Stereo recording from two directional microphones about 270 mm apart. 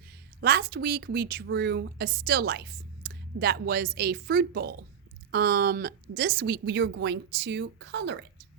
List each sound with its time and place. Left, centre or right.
0.4 s a woman's voice: right